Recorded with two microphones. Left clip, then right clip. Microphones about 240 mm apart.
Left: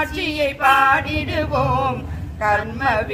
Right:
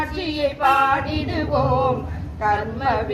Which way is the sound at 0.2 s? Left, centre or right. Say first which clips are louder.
Even; left.